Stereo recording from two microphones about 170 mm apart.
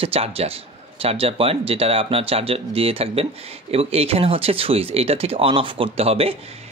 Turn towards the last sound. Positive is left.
turn(degrees=-35)  # may be behind; listen again after turning